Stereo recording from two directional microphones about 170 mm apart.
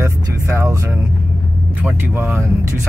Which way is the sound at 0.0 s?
15° right (ahead or behind).